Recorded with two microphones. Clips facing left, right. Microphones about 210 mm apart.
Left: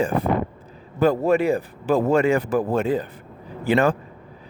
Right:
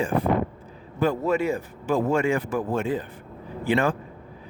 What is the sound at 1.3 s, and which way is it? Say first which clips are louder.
Speech: left 4 dB; 65° left (ahead or behind).